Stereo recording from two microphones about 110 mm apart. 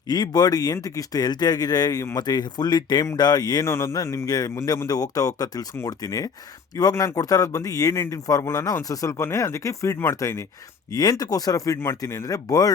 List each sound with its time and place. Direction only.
0.1 s speech: 35° left (ahead or behind)
3.7 s speech: 25° left (ahead or behind)